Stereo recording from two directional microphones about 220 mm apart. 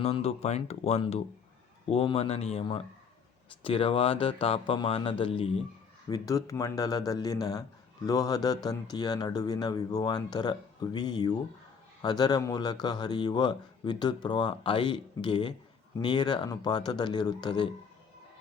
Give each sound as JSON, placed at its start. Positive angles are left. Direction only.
{"t": 0.0, "sound": "speech", "side_deg": 30}